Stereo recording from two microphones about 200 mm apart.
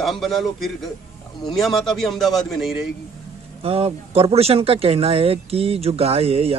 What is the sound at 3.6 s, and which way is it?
Speech, 30° right (ahead or behind).